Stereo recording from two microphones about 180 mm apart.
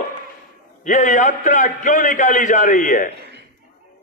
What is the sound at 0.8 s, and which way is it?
A man's voice, 45° left (ahead or behind).